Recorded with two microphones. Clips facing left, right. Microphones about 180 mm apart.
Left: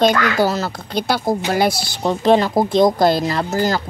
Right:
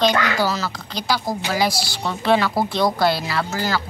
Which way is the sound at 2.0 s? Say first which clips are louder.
Left 5 dB; 40° left (ahead or behind).